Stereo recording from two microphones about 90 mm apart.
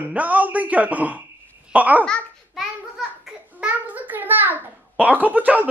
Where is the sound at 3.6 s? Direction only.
15° right (ahead or behind).